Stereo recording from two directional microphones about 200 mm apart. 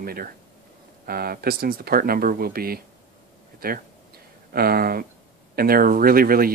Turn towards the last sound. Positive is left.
turn(degrees=-45)  # may be behind; listen again after turning